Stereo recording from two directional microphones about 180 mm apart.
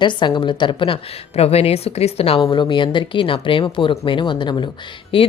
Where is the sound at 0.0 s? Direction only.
25° left (ahead or behind).